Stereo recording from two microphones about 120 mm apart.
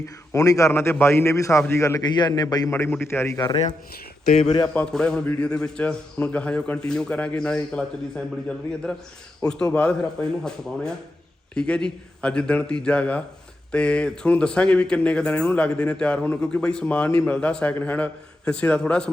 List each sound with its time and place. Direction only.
0.3 s a man's voice: 25° left (ahead or behind)
2.0 s a man's voice: 35° left (ahead or behind)
4.7 s speech: 10° left (ahead or behind)